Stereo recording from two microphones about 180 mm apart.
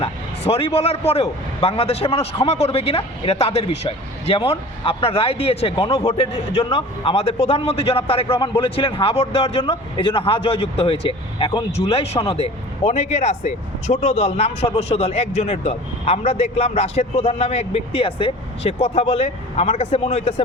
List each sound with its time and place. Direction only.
0.0 s speech: 35° left (ahead or behind)